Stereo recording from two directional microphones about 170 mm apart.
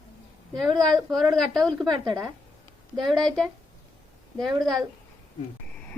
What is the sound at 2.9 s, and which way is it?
Speech, centre (ahead or behind).